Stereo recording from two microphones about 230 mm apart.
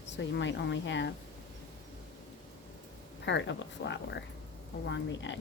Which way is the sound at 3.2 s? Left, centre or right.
Left.